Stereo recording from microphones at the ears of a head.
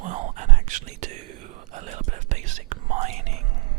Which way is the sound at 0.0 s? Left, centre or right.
Right.